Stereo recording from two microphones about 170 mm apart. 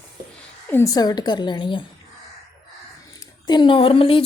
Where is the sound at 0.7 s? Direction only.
15° left (ahead or behind).